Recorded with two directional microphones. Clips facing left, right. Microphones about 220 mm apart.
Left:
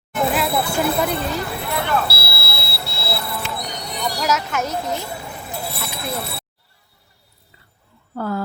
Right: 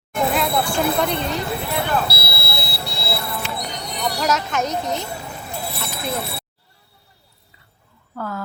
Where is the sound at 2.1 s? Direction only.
20° right (ahead or behind).